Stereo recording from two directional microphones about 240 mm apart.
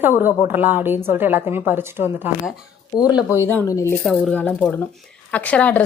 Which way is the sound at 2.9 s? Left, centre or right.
Centre.